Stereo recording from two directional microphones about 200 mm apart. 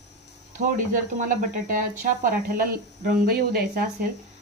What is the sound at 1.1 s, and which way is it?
Speech, 40° right (ahead or behind).